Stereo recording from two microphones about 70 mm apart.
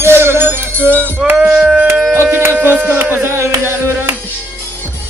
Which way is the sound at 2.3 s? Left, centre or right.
Right.